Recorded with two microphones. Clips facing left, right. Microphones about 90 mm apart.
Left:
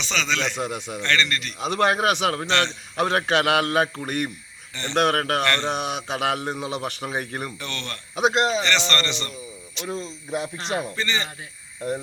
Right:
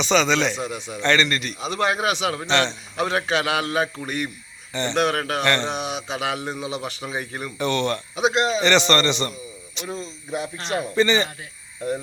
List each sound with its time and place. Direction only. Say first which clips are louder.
0.0 s a man's voice: right 7 dB; 15° right (ahead or behind)
0.5 s a man's voice: left 1 dB; 55° left (ahead or behind)
1.0 s speech: right 4 dB; 20° right (ahead or behind)
1.6 s a man's voice: left 3 dB; 55° left (ahead or behind)
2.5 s a man's voice: right 5 dB; 20° right (ahead or behind)
3.0 s a man's voice: left 1 dB; 55° left (ahead or behind)
4.7 s speech: right 6 dB; 20° right (ahead or behind)
4.9 s a man's voice: left 2 dB; 50° left (ahead or behind)
7.6 s a man's voice: right 11 dB; 15° right (ahead or behind)
8.1 s a man's voice: left 2 dB; 50° left (ahead or behind)
8.6 s a man's voice: right 6 dB; 15° right (ahead or behind)
10.9 s a man's voice: right 8 dB; 20° right (ahead or behind)